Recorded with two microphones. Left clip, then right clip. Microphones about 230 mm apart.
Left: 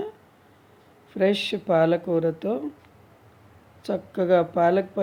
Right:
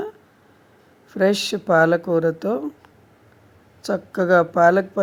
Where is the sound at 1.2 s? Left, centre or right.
Centre.